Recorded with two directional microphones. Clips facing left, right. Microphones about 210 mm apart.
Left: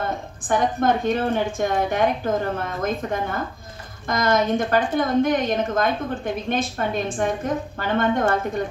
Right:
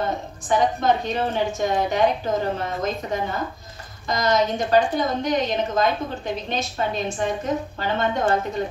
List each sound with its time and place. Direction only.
0.4 s a woman's voice: 50° left (ahead or behind)